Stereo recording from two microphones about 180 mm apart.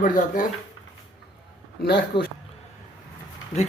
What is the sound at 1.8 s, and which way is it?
Speech, 55° left (ahead or behind).